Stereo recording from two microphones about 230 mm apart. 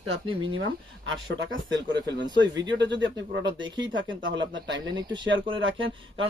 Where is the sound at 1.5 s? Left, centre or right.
Right.